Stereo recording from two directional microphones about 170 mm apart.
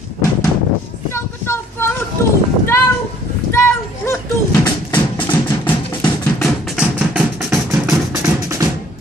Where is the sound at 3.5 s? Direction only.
15° left (ahead or behind).